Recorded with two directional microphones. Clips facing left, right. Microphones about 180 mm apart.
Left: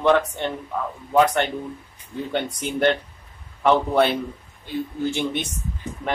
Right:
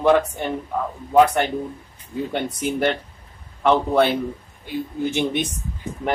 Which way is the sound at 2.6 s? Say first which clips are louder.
Left 1 dB; 5° right (ahead or behind).